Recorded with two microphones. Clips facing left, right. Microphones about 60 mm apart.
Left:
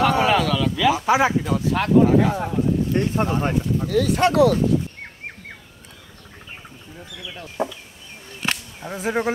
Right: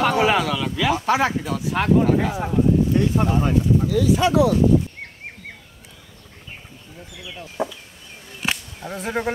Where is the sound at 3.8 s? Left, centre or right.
Left.